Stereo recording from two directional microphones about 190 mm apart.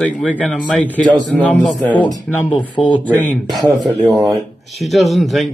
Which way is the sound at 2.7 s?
25° left (ahead or behind).